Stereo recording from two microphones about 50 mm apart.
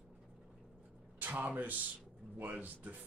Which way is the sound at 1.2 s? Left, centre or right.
Right.